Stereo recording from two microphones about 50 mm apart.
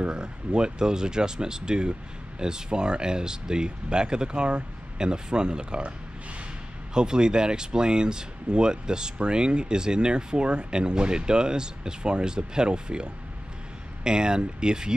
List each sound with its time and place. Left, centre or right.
0.0 s speech: centre